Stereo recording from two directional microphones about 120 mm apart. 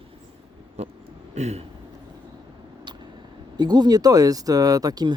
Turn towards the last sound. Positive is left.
turn(degrees=-35)  # may be behind; listen again after turning